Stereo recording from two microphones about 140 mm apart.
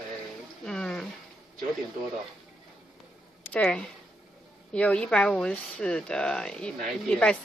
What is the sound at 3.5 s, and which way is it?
Speech, 5° left (ahead or behind).